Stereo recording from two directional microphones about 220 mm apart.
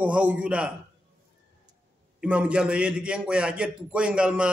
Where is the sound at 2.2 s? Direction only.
5° right (ahead or behind).